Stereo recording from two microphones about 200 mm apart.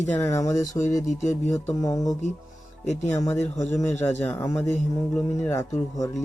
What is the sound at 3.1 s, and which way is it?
Speech, 10° left (ahead or behind).